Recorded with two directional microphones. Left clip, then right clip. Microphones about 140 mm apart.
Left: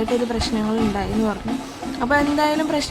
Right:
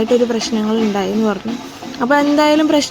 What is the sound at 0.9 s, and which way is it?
Speech, 25° right (ahead or behind).